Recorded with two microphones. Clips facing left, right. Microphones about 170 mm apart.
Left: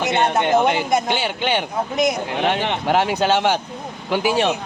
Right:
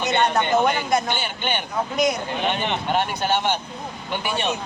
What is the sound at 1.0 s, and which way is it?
Speech, 90° left.